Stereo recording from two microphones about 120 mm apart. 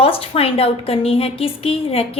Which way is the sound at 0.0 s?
55° left (ahead or behind).